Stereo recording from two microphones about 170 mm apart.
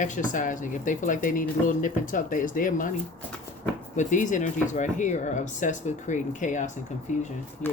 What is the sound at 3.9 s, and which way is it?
Speech, 50° left (ahead or behind).